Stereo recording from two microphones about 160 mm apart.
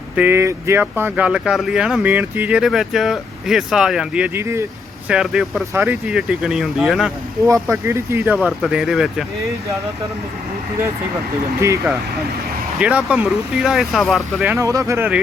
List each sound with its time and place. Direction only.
0.2 s speech: 15° right (ahead or behind)
5.0 s speech: 5° right (ahead or behind)
7.4 s speech: 15° right (ahead or behind)
8.4 s speech: 5° right (ahead or behind)
12.8 s speech: 10° right (ahead or behind)
14.5 s speech: 20° right (ahead or behind)